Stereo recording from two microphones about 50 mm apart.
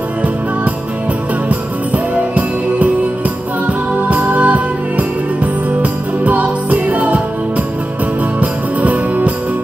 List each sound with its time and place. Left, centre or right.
2.1 s music: right